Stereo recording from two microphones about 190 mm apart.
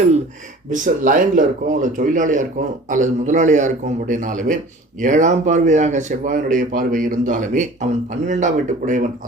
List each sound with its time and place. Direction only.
0.7 s a man's voice: 45° right (ahead or behind)